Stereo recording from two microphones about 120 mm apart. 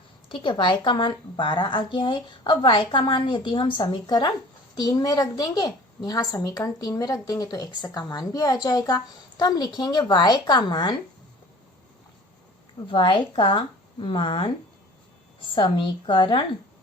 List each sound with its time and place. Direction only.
0.3 s a woman's voice: 40° left (ahead or behind)
12.9 s a woman's voice: 45° left (ahead or behind)